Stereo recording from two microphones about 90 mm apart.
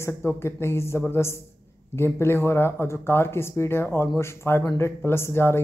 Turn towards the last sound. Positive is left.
turn(degrees=25)  # may be behind; listen again after turning